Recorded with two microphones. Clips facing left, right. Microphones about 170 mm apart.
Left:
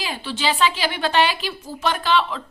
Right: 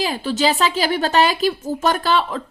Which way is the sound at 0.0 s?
40° right (ahead or behind).